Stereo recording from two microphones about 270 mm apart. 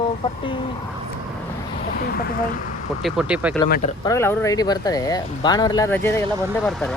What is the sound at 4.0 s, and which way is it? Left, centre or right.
Speech, centre.